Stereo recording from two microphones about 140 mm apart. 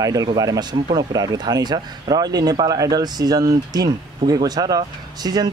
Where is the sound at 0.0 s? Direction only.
25° right (ahead or behind).